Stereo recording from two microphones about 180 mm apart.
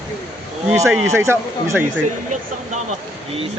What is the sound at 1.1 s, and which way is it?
Speech, 15° right (ahead or behind).